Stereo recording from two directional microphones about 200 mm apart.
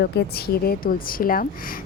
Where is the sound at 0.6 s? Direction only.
45° left (ahead or behind).